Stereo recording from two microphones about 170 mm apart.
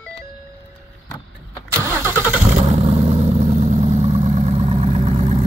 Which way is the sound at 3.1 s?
40° right (ahead or behind).